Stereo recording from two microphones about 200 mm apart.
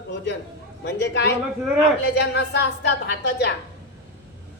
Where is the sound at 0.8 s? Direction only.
60° left (ahead or behind).